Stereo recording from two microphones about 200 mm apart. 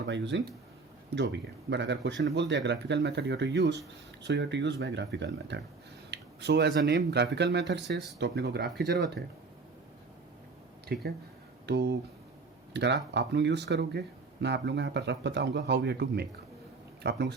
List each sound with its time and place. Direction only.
0.0 s speech: 60° right (ahead or behind)
8.6 s speech: centre (ahead or behind)
8.9 s speech: 55° right (ahead or behind)
10.9 s speech: 55° right (ahead or behind)